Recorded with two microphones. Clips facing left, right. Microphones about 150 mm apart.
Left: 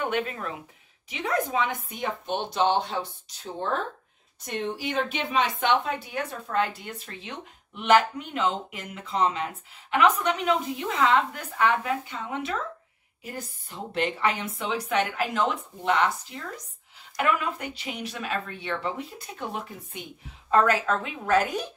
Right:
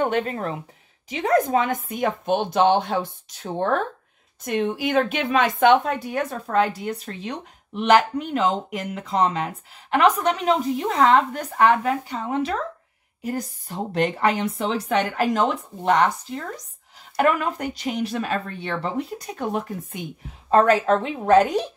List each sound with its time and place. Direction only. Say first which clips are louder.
0.0 s speech: right 6 dB; 40° right (ahead or behind)
20.4 s speech: right 5 dB; 30° right (ahead or behind)